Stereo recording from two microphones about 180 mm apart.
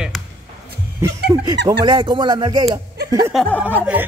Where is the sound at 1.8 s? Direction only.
25° right (ahead or behind).